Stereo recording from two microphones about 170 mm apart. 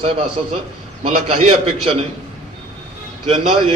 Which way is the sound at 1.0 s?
35° right (ahead or behind).